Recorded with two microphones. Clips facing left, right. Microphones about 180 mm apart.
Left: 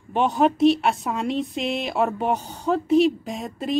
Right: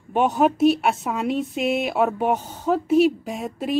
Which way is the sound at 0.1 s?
5° right (ahead or behind).